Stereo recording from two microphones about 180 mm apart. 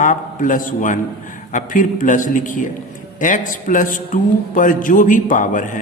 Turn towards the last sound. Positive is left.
turn(degrees=45)  # may be behind; listen again after turning